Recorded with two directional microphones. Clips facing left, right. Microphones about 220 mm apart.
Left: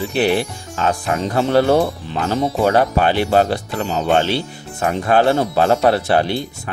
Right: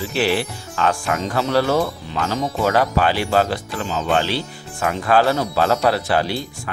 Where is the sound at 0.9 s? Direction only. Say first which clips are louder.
Left 2 dB; 35° left (ahead or behind).